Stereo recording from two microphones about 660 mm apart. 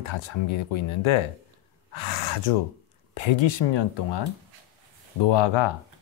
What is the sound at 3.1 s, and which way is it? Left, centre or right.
Speech, left.